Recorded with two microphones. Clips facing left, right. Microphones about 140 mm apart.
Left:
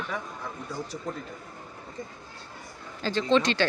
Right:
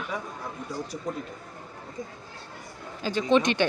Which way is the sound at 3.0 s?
10° right (ahead or behind).